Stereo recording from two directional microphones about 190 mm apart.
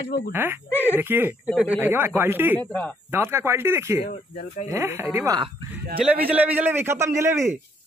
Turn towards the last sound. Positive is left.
turn(degrees=-15)  # may be behind; listen again after turning